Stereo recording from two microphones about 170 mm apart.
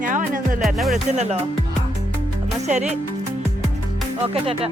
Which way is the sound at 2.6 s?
45° right (ahead or behind).